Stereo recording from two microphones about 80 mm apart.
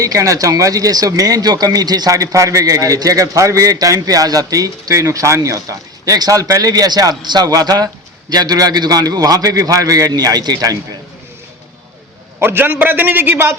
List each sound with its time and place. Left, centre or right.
0.0 s speech: right
10.1 s speech: right
12.4 s a man's voice: right